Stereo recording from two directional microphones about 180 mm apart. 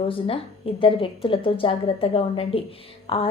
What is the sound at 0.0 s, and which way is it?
A woman's voice, 30° left (ahead or behind).